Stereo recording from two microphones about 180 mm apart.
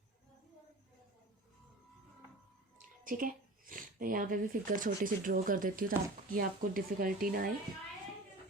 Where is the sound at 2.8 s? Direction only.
50° right (ahead or behind).